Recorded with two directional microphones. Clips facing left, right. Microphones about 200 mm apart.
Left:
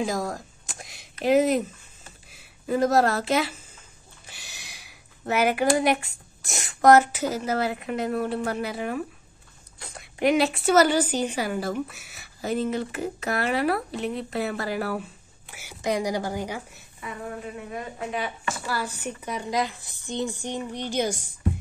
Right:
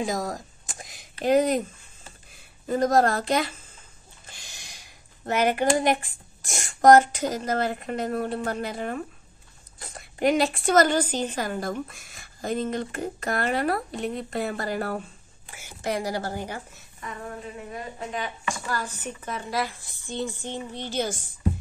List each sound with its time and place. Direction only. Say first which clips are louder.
0.0 s a sound: left 1 dB; centre (ahead or behind)
1.2 s a woman's voice: left 1 dB; 5° left (ahead or behind)
18.7 s a woman's voice: left 4 dB; 10° left (ahead or behind)